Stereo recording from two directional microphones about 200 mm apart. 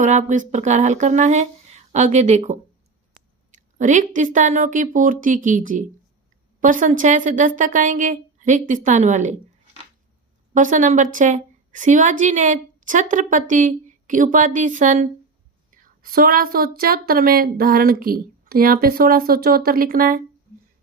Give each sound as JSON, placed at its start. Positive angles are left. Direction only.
{"t": 0.0, "sound": "a woman's voice", "side_deg": -35}
{"t": 10.5, "sound": "a woman's voice", "side_deg": -40}